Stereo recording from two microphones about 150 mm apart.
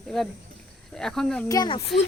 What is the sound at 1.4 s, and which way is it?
Speech, 25° left (ahead or behind).